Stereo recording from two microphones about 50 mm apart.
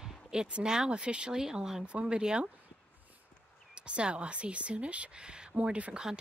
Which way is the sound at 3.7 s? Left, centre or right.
Centre.